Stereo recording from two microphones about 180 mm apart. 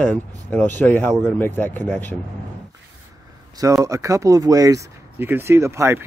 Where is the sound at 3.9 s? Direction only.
15° right (ahead or behind).